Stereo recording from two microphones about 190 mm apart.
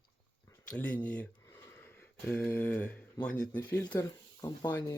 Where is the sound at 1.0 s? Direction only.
10° left (ahead or behind).